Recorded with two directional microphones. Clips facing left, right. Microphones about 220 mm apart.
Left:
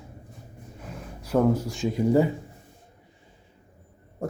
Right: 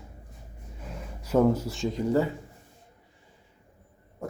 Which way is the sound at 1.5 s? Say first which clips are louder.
Left 2 dB; 5° right (ahead or behind).